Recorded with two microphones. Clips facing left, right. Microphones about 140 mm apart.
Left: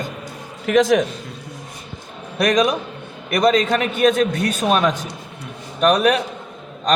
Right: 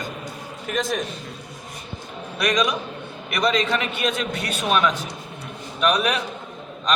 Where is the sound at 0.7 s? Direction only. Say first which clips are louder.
Left 11 dB; 90° left.